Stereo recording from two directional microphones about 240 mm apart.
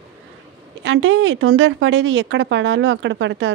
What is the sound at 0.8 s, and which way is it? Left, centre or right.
Speech, right.